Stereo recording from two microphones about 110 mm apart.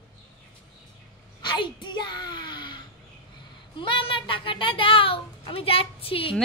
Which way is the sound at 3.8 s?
50° left (ahead or behind).